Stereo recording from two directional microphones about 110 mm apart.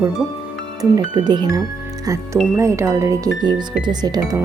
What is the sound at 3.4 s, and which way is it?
Speech, 40° right (ahead or behind).